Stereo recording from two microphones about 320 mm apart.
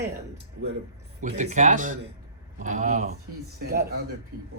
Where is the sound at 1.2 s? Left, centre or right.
Right.